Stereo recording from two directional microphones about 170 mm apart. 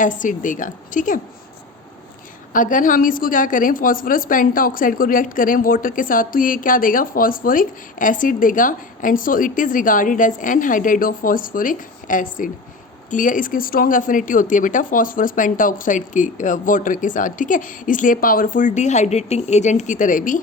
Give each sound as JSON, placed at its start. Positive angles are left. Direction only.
{"t": 0.0, "sound": "a woman's voice", "side_deg": 50}
{"t": 2.5, "sound": "a woman's voice", "side_deg": 50}